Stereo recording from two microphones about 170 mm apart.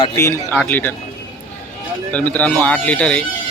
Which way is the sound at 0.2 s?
15° left (ahead or behind).